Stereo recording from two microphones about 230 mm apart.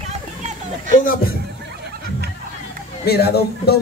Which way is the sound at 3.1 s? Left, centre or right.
Left.